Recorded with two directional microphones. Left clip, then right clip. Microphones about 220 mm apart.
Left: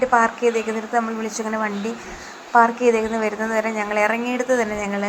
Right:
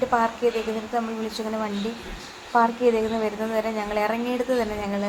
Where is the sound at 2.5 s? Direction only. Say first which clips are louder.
Left 5 dB; 20° left (ahead or behind).